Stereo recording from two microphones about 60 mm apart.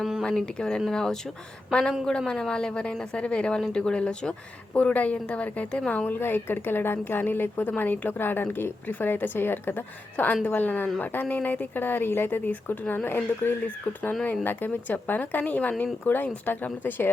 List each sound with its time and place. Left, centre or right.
0.2 s a woman's voice: centre
6.1 s a woman's voice: left
13.7 s a woman's voice: left